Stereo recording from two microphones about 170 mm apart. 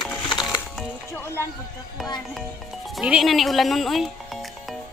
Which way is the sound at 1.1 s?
15° left (ahead or behind).